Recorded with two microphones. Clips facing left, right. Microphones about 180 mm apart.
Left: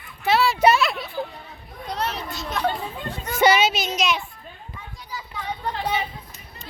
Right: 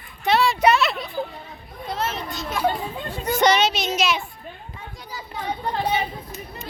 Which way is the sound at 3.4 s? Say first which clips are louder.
Left 1 dB; 5° left (ahead or behind).